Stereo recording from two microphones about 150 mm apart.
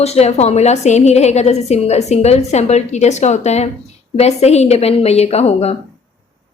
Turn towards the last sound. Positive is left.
turn(degrees=45)  # may be behind; listen again after turning